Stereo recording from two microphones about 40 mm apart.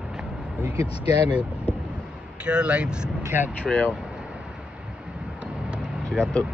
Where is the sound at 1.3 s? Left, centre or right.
Right.